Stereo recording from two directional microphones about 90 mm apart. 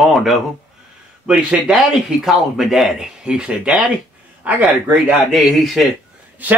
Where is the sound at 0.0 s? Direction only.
Centre (ahead or behind).